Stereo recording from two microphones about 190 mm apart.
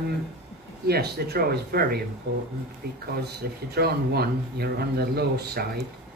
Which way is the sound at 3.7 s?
55° right (ahead or behind).